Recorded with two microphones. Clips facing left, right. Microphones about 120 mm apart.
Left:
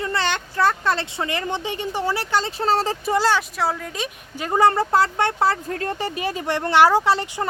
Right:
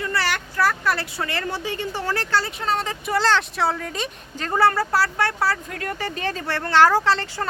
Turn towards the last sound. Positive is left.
turn(degrees=15)  # may be behind; listen again after turning